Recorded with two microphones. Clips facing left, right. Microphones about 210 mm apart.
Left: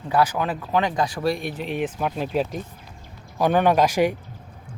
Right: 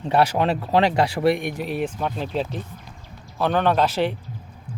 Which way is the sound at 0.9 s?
70° right (ahead or behind).